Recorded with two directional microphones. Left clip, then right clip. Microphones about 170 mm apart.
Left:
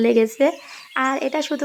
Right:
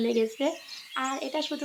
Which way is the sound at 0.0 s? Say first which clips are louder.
Left 10 dB; 40° left (ahead or behind).